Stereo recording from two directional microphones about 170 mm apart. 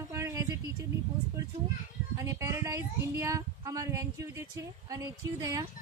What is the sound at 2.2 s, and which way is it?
Speech, 20° right (ahead or behind).